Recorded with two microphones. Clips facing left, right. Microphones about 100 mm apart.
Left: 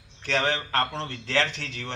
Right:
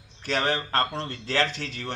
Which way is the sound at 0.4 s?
35° right (ahead or behind).